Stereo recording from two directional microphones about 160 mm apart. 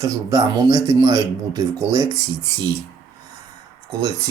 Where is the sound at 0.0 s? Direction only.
20° right (ahead or behind).